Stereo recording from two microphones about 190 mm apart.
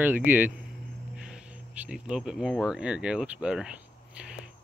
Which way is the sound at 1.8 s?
5° right (ahead or behind).